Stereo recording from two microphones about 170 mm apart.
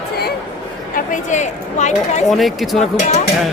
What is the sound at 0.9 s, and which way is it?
Speech, 50° left (ahead or behind).